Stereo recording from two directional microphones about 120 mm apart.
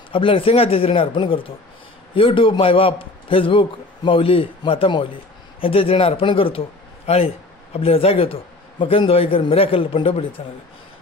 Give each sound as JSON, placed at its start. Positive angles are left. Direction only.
{"t": 0.1, "sound": "speech", "side_deg": 45}